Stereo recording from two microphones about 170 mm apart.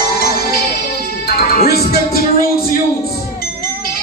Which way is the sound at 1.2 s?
65° left (ahead or behind).